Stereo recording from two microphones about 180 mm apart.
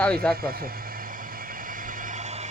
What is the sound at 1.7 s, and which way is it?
Vehicle, 50° right (ahead or behind).